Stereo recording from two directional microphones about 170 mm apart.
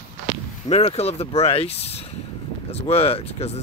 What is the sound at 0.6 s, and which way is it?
Speech, 35° left (ahead or behind).